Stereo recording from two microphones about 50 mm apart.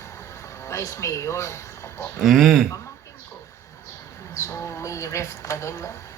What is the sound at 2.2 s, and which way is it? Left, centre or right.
Speech, centre.